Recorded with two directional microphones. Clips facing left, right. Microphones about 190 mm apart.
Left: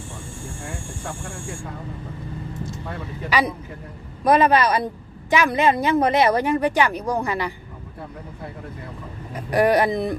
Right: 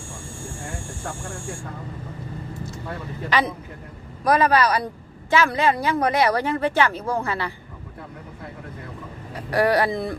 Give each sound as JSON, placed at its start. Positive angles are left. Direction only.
{"t": 3.2, "sound": "speech", "side_deg": 10}
{"t": 4.2, "sound": "speech", "side_deg": 25}
{"t": 9.3, "sound": "speech", "side_deg": 20}